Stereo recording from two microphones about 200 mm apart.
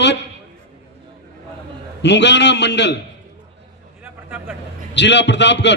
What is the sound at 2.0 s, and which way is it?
Speech, 60° left (ahead or behind).